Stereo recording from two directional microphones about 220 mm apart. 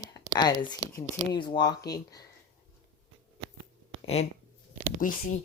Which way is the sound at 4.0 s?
30° left (ahead or behind).